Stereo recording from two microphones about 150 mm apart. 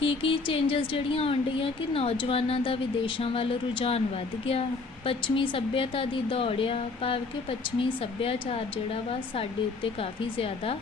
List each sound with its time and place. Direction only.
0.0 s speech: 35° left (ahead or behind)
5.0 s speech: 35° left (ahead or behind)